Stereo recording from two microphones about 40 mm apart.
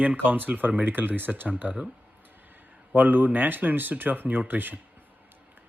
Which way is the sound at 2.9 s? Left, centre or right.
Right.